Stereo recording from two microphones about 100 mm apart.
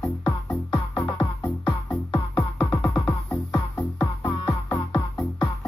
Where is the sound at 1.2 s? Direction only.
50° left (ahead or behind).